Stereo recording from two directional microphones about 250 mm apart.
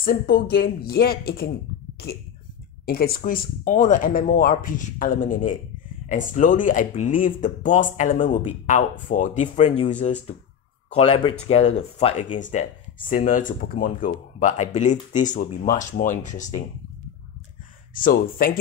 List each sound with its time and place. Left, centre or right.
0.0 s speech: left
2.8 s speech: left
17.9 s speech: left